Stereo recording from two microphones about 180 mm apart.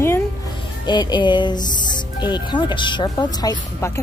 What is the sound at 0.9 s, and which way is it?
Speech, 25° left (ahead or behind).